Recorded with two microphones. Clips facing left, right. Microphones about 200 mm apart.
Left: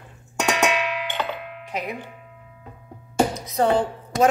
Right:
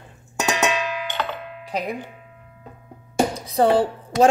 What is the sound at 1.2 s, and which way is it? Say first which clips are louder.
Music: even; 10° left (ahead or behind).